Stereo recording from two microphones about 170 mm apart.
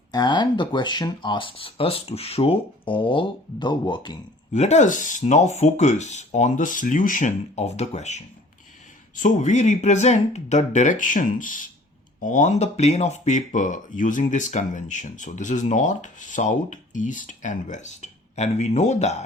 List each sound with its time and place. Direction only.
0.1 s speech: 25° left (ahead or behind)
4.5 s speech: 40° left (ahead or behind)